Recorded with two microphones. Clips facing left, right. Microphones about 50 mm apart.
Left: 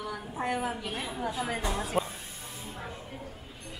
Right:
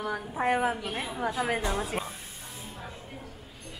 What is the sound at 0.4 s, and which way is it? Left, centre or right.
Speech, right.